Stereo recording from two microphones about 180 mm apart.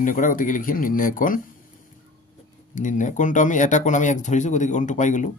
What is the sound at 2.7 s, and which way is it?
Speech, 45° left (ahead or behind).